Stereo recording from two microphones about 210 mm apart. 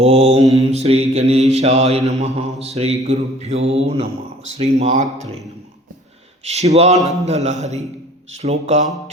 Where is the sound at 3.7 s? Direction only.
30° right (ahead or behind).